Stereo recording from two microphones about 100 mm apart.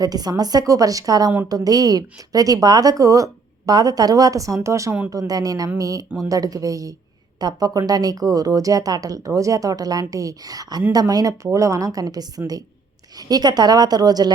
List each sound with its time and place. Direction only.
0.0 s a woman's voice: 40° right (ahead or behind)